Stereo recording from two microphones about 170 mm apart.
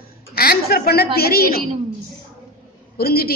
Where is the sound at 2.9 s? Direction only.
65° left (ahead or behind).